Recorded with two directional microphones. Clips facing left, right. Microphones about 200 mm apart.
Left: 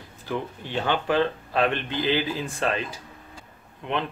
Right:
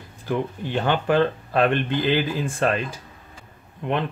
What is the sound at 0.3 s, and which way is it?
Speech, 50° right (ahead or behind).